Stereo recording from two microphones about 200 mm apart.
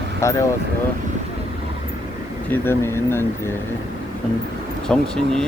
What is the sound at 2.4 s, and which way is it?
Speech, 10° left (ahead or behind).